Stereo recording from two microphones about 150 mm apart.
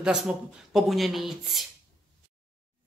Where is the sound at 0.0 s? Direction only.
5° right (ahead or behind).